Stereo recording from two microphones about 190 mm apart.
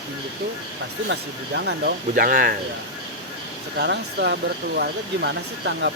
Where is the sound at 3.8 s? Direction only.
60° right (ahead or behind).